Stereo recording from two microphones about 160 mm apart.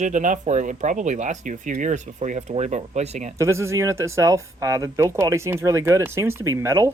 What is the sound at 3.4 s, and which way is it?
Speech, 15° right (ahead or behind).